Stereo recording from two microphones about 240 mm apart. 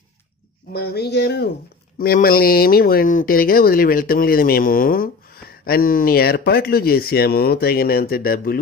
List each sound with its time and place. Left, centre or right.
0.8 s speech: left